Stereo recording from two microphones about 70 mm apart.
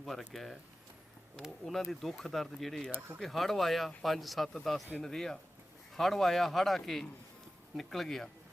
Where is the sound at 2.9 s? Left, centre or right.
Right.